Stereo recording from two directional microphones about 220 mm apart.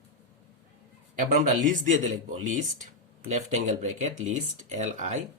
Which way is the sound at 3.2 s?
35° right (ahead or behind).